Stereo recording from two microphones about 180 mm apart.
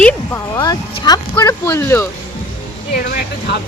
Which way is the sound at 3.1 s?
70° left (ahead or behind).